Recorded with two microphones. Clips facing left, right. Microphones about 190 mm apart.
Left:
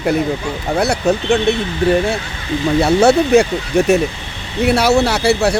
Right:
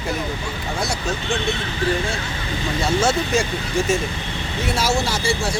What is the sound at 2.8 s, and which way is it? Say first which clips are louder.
A man's voice: left 8 dB; 65° left (ahead or behind).